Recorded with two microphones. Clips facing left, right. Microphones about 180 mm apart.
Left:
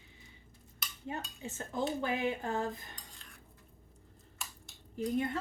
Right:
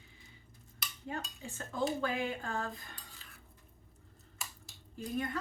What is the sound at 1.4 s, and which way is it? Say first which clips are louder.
Speech: even; 20° left (ahead or behind).